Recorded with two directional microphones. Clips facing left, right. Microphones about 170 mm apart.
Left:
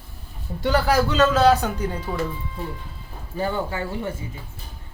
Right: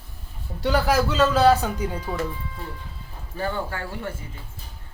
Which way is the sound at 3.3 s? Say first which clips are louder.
Left 3 dB; 15° left (ahead or behind).